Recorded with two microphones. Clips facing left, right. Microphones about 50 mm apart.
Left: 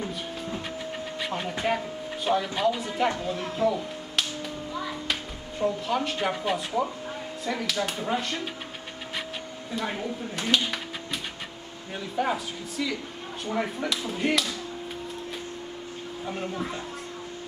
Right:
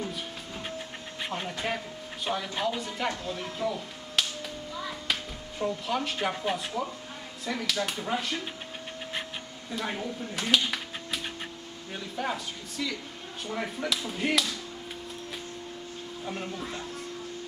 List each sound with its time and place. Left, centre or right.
1.6 s speech: centre
3.6 s music: centre
5.6 s speech: centre
6.7 s speech: centre
7.4 s speech: centre
9.7 s speech: centre